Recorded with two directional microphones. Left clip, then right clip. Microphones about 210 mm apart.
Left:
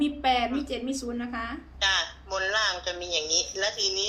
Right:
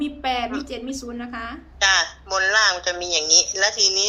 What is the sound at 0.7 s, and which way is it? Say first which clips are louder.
Speech: right 1 dB; 10° right (ahead or behind).